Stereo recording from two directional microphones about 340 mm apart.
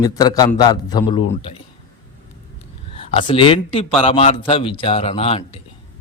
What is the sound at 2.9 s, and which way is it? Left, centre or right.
A man's voice, centre.